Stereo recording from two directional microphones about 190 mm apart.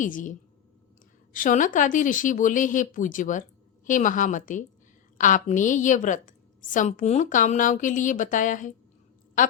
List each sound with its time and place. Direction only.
0.0 s a woman's voice: 45° left (ahead or behind)